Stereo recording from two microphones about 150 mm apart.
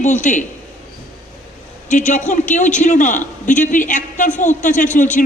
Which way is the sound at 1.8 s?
55° left (ahead or behind).